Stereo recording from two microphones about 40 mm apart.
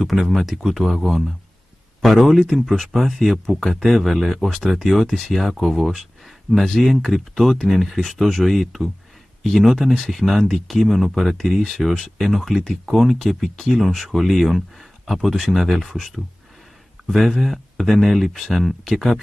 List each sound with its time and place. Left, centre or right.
0.0 s speech: centre
2.7 s speech: centre
6.5 s speech: centre
6.8 s speech: centre
13.7 s speech: centre
17.1 s speech: centre